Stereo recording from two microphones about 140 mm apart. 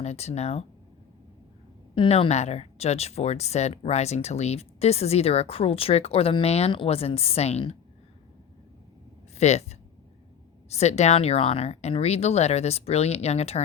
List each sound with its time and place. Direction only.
0.0 s speech: 50° left (ahead or behind)
2.0 s speech: 40° left (ahead or behind)
9.4 s speech: 50° left (ahead or behind)